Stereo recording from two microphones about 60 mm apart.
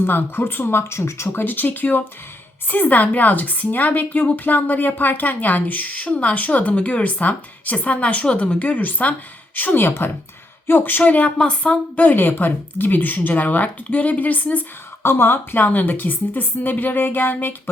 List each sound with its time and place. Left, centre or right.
0.0 s a woman's voice: left
1.4 s a woman's voice: left
12.0 s a woman's voice: left
15.0 s a woman's voice: left